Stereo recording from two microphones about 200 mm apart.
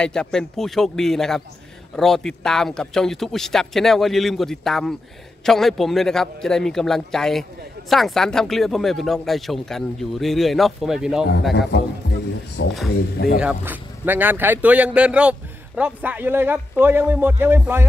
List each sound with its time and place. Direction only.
0.0 s speech: 5° left (ahead or behind)
11.7 s speech: 55° left (ahead or behind)
13.4 s speech: 5° right (ahead or behind)